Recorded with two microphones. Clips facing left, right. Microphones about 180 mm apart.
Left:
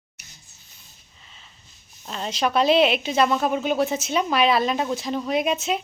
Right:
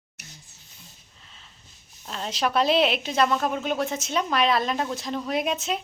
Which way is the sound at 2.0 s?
Centre (ahead or behind).